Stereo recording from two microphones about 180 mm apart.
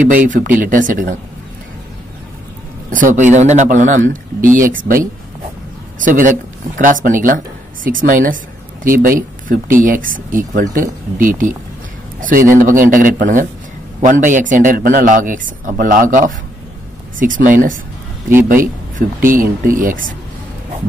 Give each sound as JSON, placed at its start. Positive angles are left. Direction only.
{"t": 0.0, "sound": "speech", "side_deg": -45}
{"t": 2.9, "sound": "speech", "side_deg": -45}